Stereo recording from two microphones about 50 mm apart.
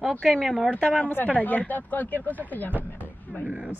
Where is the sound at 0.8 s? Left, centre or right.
Left.